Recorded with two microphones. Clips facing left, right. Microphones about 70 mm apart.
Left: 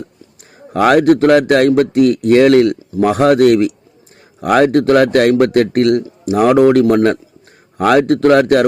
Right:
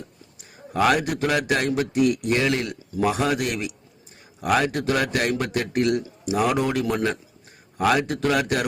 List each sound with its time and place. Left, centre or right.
0.7 s a man's voice: left